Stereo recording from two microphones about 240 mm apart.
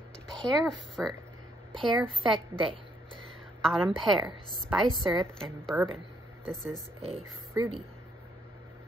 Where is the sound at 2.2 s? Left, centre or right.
Centre.